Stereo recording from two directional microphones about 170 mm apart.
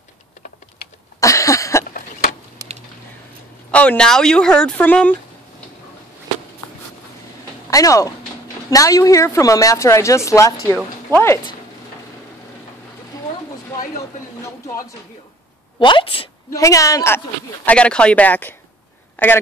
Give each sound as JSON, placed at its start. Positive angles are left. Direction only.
{"t": 1.2, "sound": "cough", "side_deg": 20}
{"t": 2.6, "sound": "a sound", "side_deg": -20}
{"t": 3.7, "sound": "speech", "side_deg": 5}
{"t": 7.7, "sound": "a woman's voice", "side_deg": 20}
{"t": 15.8, "sound": "a woman's voice", "side_deg": 30}
{"t": 16.5, "sound": "a woman's voice", "side_deg": 20}
{"t": 17.6, "sound": "speech", "side_deg": 5}